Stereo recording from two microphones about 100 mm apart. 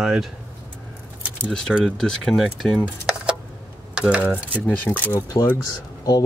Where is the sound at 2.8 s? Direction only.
10° right (ahead or behind).